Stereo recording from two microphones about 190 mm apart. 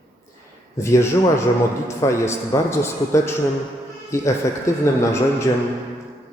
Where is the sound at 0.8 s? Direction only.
15° left (ahead or behind).